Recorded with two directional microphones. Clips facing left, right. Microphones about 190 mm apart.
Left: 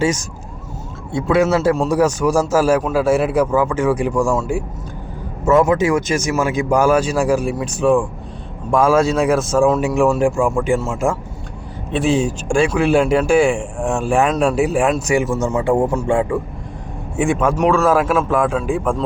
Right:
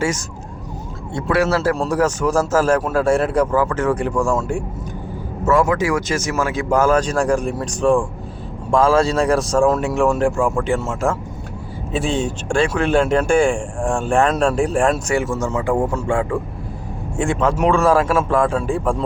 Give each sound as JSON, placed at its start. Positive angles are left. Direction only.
{"t": 1.1, "sound": "speech", "side_deg": 15}
{"t": 5.5, "sound": "a man's voice", "side_deg": 20}
{"t": 11.9, "sound": "speech", "side_deg": 0}
{"t": 17.2, "sound": "a man's voice", "side_deg": 5}